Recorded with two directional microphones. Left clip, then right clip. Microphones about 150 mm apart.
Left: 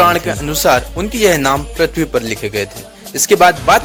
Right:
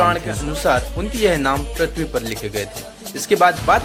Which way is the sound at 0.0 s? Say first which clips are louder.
Left 6 dB; 55° left (ahead or behind).